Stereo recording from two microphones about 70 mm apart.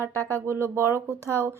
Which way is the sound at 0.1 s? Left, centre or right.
Left.